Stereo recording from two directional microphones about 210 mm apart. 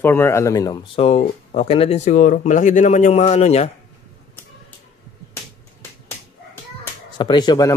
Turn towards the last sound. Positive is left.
turn(degrees=20)  # may be behind; listen again after turning